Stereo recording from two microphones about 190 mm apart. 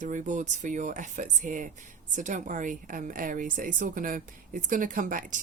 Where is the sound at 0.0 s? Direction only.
40° right (ahead or behind).